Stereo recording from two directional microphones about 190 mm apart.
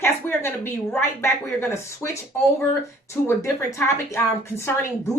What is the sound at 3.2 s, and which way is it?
A woman's voice, 15° left (ahead or behind).